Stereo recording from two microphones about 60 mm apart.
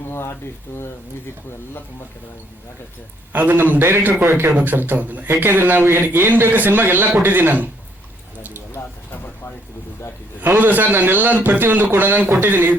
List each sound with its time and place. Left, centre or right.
0.1 s a sound: left
3.3 s a man's voice: right
10.4 s a man's voice: right